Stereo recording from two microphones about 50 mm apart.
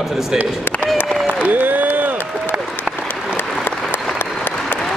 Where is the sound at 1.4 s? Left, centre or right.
Right.